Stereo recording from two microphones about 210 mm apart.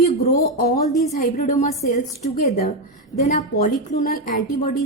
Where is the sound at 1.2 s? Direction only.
40° left (ahead or behind).